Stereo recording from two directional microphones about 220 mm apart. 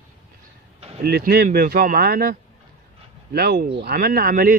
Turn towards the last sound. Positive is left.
turn(degrees=-40)  # may be behind; listen again after turning